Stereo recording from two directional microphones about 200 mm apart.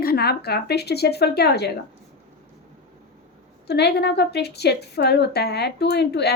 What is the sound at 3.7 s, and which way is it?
A woman's voice, 55° left (ahead or behind).